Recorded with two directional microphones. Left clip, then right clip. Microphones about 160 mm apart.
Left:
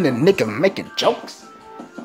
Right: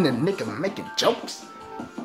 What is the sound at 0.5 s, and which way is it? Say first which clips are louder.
Speech: left 10 dB; 30° left (ahead or behind).